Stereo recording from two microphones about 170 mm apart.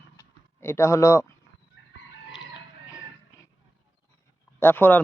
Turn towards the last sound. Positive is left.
turn(degrees=10)  # may be behind; listen again after turning